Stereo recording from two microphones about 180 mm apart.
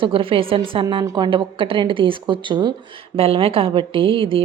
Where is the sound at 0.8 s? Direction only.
20° right (ahead or behind).